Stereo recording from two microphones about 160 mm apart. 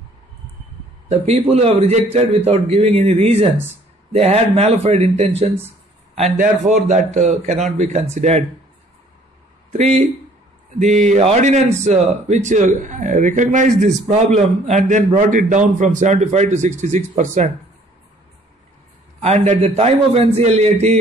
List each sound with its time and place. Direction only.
1.0 s speech: 40° right (ahead or behind)
9.7 s speech: 45° right (ahead or behind)
19.2 s speech: 45° right (ahead or behind)